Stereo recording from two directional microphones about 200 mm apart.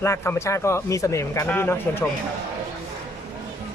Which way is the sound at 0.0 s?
10° left (ahead or behind).